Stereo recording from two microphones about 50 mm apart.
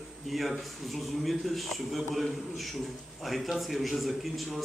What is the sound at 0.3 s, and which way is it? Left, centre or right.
A man's voice, centre.